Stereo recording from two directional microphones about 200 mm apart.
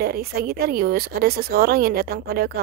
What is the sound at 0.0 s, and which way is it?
Speech, 50° right (ahead or behind).